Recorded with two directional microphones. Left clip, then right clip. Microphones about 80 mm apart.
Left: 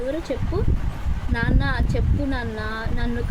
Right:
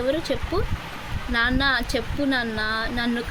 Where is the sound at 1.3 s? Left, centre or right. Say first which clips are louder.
Right 5 dB; right.